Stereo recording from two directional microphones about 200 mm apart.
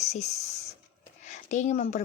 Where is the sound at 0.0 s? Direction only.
35° left (ahead or behind).